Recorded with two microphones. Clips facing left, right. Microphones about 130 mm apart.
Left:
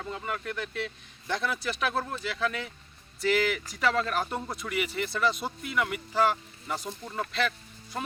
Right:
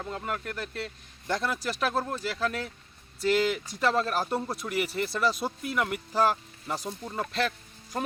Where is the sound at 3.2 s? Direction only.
Centre (ahead or behind).